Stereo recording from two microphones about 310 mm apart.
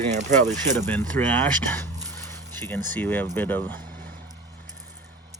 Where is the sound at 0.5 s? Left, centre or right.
Centre.